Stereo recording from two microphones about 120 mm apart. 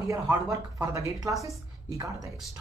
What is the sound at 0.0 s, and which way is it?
A woman's voice, 25° right (ahead or behind).